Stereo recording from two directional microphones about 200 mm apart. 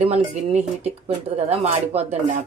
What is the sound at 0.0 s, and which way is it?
Speech, 30° right (ahead or behind).